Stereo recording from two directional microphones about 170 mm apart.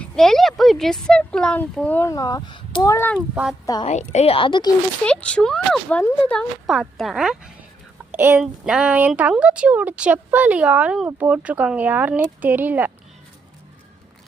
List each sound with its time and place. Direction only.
0.0 s speech: centre (ahead or behind); by 3.1 s 20° left (ahead or behind)
3.2 s speech: 10° right (ahead or behind)
3.8 s a woman's voice: 40° left (ahead or behind)
5.0 s speech: 5° left (ahead or behind); by 12.9 s 10° right (ahead or behind)